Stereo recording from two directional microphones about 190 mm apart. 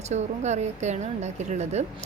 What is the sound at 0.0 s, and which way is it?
Speech, 35° right (ahead or behind).